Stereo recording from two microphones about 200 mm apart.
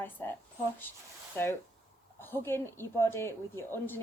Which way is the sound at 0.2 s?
10° left (ahead or behind).